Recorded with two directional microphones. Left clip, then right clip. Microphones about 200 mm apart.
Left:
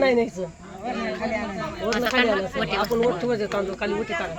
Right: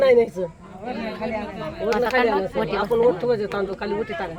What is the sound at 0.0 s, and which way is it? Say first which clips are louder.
Speech: right 4 dB; 55° right (ahead or behind).